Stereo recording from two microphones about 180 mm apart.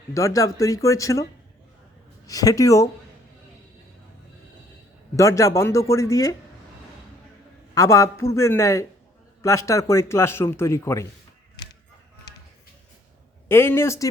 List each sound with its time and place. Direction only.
0.1 s a man's voice: 15° left (ahead or behind)
5.1 s a man's voice: 15° left (ahead or behind)
7.8 s a man's voice: 15° left (ahead or behind)
13.5 s a man's voice: 10° left (ahead or behind)